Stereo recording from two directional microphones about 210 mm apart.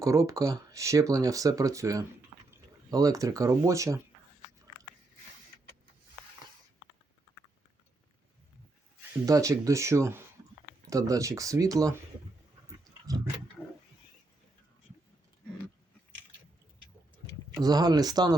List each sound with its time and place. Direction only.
0.0 s speech: 15° right (ahead or behind)
9.2 s speech: 15° right (ahead or behind)
17.6 s speech: 20° right (ahead or behind)